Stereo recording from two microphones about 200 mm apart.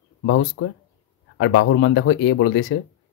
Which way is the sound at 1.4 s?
80° left.